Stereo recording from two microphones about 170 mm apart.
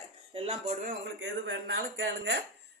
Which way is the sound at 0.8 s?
85° right.